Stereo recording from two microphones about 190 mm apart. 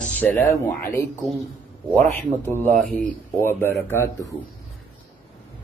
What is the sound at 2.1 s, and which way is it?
Speech, 10° left (ahead or behind).